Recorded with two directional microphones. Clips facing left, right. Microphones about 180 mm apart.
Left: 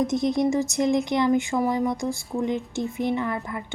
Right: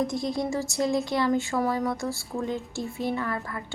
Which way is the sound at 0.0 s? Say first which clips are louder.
Left 5 dB; 20° left (ahead or behind).